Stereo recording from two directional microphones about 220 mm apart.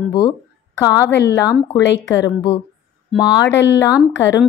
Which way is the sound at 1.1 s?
50° left (ahead or behind).